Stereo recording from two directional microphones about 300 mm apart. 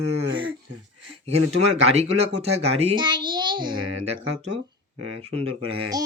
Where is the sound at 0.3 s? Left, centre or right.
Right.